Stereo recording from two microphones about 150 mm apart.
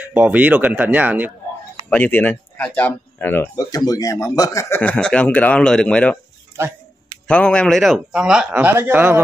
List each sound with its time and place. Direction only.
0.0 s speech: 10° right (ahead or behind)
1.9 s speech: 10° left (ahead or behind)
3.5 s a man's voice: 25° left (ahead or behind); by 6.1 s 5° left (ahead or behind)
6.5 s a sound: 15° right (ahead or behind)
7.2 s a man's voice: 5° left (ahead or behind); by 9.2 s 15° right (ahead or behind)